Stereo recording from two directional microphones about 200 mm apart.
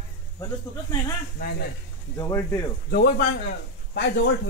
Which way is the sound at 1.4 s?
50° left (ahead or behind).